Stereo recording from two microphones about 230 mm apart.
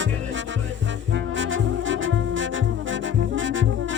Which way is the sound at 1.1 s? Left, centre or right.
Right.